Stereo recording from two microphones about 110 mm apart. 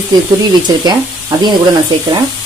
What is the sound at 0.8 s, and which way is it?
Speech, 40° right (ahead or behind).